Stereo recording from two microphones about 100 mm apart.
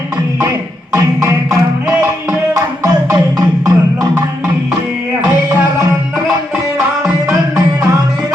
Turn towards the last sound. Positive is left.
turn(degrees=-5)  # may be behind; listen again after turning